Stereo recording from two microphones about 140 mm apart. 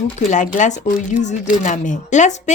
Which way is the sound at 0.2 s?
60° left (ahead or behind).